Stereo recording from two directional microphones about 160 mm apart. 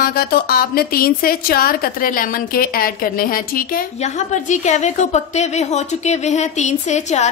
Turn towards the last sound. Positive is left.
turn(degrees=45)  # may be behind; listen again after turning